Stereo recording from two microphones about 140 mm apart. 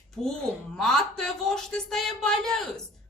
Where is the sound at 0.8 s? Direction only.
5° left (ahead or behind).